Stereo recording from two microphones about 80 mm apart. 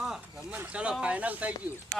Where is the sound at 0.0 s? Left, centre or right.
Centre.